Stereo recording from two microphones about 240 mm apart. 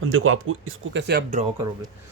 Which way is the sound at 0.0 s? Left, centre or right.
Right.